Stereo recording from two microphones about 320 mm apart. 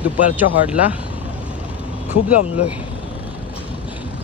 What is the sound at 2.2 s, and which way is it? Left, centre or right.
Speech, left.